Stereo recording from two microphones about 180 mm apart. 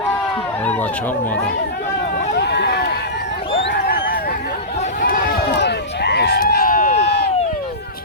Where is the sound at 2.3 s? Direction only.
70° left (ahead or behind); by 5.0 s 40° left (ahead or behind).